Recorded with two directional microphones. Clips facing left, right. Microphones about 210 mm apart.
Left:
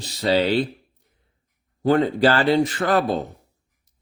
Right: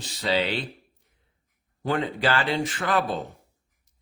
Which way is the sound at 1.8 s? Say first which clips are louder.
Left 8 dB; 40° left (ahead or behind).